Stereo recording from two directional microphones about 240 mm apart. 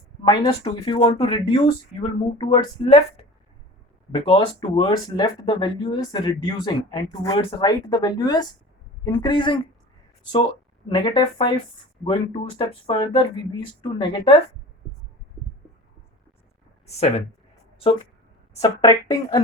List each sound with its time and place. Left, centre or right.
0.3 s speech: centre
10.8 s speech: centre
18.6 s speech: centre